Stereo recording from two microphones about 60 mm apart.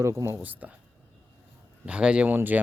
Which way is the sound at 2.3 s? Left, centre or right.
Right.